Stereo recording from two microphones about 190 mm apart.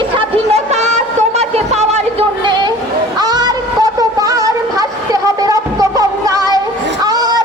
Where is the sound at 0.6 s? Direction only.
35° right (ahead or behind).